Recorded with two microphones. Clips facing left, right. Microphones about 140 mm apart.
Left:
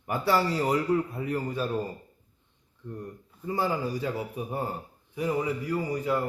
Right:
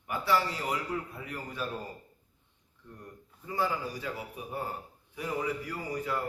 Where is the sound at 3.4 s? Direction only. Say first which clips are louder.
Left 4 dB; 30° left (ahead or behind).